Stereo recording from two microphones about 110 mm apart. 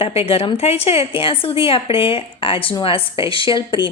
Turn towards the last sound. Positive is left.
turn(degrees=50)  # may be behind; listen again after turning